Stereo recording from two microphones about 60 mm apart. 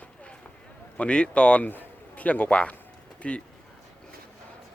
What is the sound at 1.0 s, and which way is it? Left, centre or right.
Speech, centre.